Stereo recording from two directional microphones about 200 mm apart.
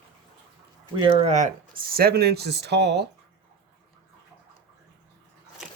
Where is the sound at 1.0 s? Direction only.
30° right (ahead or behind); by 3.0 s 55° right (ahead or behind).